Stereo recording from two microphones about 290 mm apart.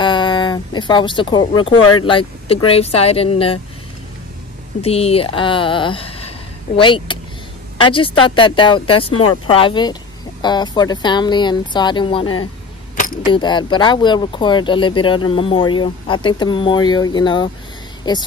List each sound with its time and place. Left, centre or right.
0.0 s speech: centre
4.8 s speech: left
9.1 s speech: left
9.5 s speech: centre
13.3 s speech: centre